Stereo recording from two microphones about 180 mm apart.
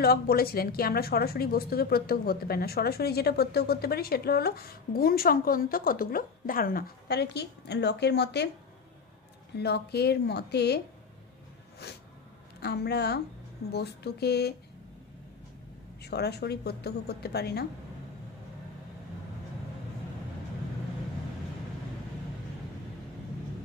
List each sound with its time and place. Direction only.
0.0 s a woman's voice: 60° left (ahead or behind)
9.6 s a woman's voice: 65° left (ahead or behind)
11.8 s a woman's voice: 65° left (ahead or behind)
16.0 s a woman's voice: 65° left (ahead or behind)